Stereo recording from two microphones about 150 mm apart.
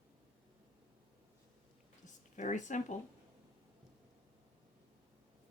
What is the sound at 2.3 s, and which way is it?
Speech, 55° left (ahead or behind).